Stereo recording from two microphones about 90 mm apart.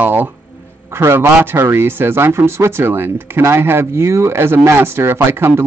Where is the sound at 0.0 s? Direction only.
20° right (ahead or behind).